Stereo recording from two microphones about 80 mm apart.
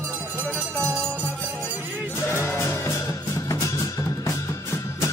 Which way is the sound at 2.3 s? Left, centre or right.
Left.